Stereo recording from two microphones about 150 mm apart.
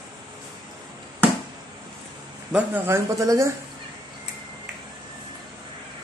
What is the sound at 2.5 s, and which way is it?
Speech, 10° right (ahead or behind).